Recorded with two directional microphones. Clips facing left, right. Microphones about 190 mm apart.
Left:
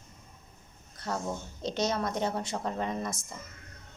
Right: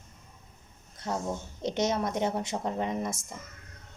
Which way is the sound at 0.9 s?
20° right (ahead or behind).